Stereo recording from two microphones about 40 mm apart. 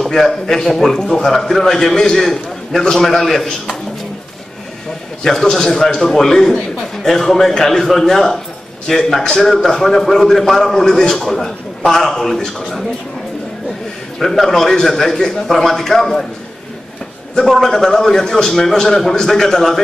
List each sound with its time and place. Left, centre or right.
0.0 s a man's voice: centre
5.2 s a man's voice: centre
14.2 s a man's voice: centre
17.4 s a man's voice: centre